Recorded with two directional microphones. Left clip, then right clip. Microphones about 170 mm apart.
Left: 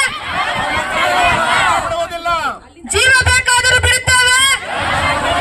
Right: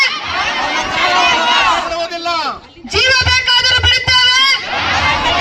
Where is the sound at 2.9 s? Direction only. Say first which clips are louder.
Left 1 dB; 40° left (ahead or behind).